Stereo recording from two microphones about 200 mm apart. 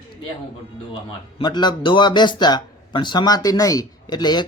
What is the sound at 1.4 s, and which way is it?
Speech, 20° left (ahead or behind).